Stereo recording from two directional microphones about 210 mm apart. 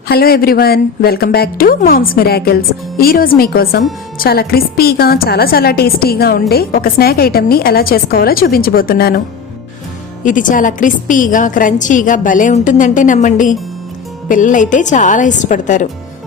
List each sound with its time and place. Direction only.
0.1 s a woman's voice: 45° left (ahead or behind)
10.2 s a woman's voice: 40° left (ahead or behind)